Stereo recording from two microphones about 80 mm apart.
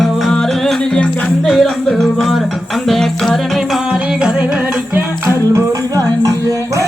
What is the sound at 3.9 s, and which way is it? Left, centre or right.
Music, centre.